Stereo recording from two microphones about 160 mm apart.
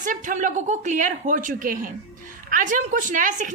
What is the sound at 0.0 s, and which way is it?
A woman's voice, 55° right (ahead or behind).